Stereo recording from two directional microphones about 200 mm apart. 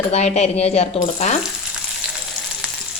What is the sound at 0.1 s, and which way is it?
Speech, 35° left (ahead or behind).